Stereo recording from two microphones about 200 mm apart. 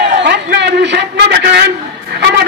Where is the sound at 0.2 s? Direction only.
60° right (ahead or behind).